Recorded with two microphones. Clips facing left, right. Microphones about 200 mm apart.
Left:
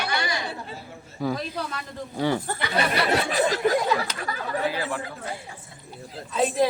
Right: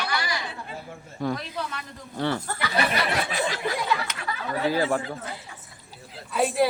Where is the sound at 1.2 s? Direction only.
5° left (ahead or behind).